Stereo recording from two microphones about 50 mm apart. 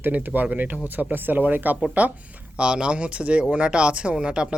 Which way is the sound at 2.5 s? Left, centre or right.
Centre.